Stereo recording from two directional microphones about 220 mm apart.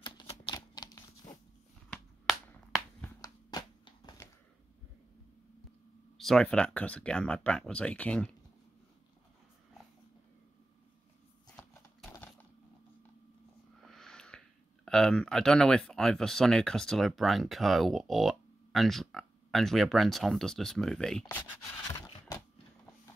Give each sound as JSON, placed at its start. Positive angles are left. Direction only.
{"t": 0.0, "sound": "typewriter", "side_deg": 20}
{"t": 1.9, "sound": "a sound", "side_deg": 0}
{"t": 3.2, "sound": "a sound", "side_deg": 20}
{"t": 6.1, "sound": "speech", "side_deg": 0}
{"t": 13.8, "sound": "snort", "side_deg": 0}
{"t": 14.9, "sound": "speech", "side_deg": 0}